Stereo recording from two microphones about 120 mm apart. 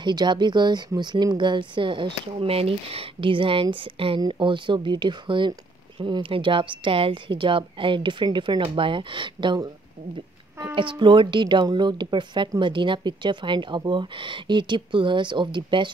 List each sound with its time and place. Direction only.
0.0 s a woman's voice: 40° right (ahead or behind)